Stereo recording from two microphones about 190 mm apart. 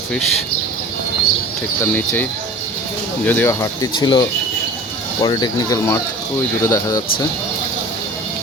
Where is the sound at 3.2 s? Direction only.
10° left (ahead or behind).